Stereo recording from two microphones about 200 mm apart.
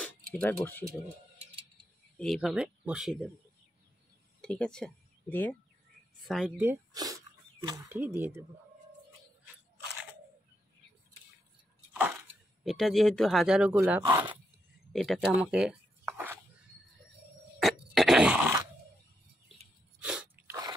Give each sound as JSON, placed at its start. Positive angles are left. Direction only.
{"t": 0.0, "sound": "speech", "side_deg": 10}
{"t": 2.1, "sound": "speech", "side_deg": 0}
{"t": 4.4, "sound": "speech", "side_deg": 5}
{"t": 6.9, "sound": "speech", "side_deg": -20}
{"t": 11.9, "sound": "a sound", "side_deg": -5}
{"t": 12.6, "sound": "speech", "side_deg": 0}
{"t": 14.0, "sound": "speech", "side_deg": -20}
{"t": 14.9, "sound": "a sound", "side_deg": 0}
{"t": 17.6, "sound": "a sound", "side_deg": 0}
{"t": 20.0, "sound": "sneeze", "side_deg": -5}